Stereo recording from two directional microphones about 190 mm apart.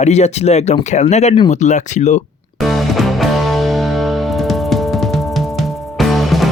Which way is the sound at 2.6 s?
Centre (ahead or behind).